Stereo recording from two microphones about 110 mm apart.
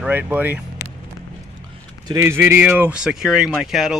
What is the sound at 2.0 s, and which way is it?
Speech, 30° right (ahead or behind).